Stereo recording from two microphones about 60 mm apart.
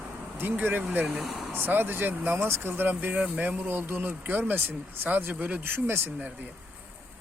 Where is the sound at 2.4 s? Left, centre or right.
Right.